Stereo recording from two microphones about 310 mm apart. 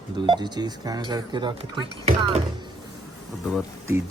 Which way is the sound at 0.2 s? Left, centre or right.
Centre.